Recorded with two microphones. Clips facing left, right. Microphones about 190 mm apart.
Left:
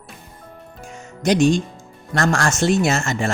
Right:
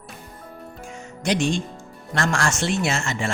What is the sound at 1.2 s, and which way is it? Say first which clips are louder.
Speech: left 6 dB; 40° left (ahead or behind).